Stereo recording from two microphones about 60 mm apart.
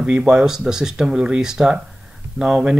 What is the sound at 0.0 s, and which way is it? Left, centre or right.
Speech, centre.